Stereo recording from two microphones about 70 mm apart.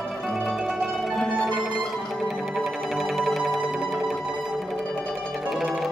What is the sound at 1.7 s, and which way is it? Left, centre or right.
Music, centre.